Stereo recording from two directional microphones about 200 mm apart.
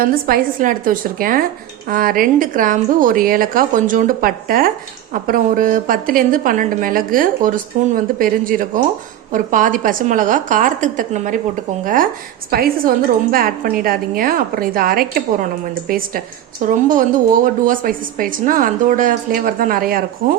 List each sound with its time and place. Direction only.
0.0 s a woman's voice: 45° right (ahead or behind)
12.5 s a woman's voice: 50° right (ahead or behind)